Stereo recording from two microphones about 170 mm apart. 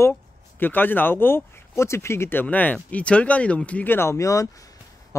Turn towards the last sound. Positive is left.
turn(degrees=20)  # may be behind; listen again after turning